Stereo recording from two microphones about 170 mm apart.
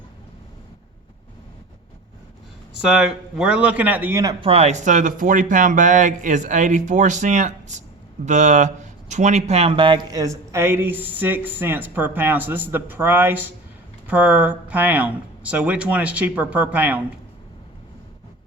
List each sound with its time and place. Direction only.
2.8 s speech: 5° right (ahead or behind)
4.4 s speech: 35° right (ahead or behind); by 17.0 s 10° right (ahead or behind)